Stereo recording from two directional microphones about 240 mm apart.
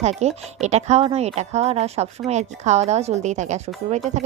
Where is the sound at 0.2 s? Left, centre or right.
Right.